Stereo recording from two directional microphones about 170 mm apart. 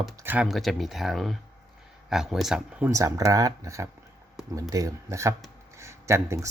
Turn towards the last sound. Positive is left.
turn(degrees=-15)  # may be behind; listen again after turning